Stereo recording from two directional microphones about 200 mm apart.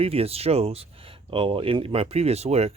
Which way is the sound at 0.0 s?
30° right (ahead or behind).